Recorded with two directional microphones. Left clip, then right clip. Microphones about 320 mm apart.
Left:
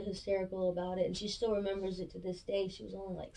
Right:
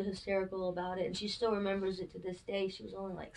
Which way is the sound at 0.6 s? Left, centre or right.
Right.